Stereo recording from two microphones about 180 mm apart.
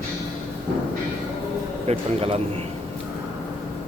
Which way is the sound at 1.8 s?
30° right (ahead or behind).